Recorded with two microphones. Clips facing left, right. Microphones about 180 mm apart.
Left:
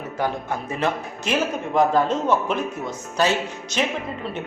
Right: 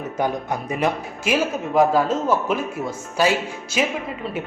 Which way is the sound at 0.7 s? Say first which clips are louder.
Right 2 dB; 10° right (ahead or behind).